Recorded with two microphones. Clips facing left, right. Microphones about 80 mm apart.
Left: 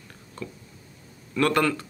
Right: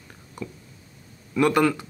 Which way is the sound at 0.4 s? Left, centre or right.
Centre.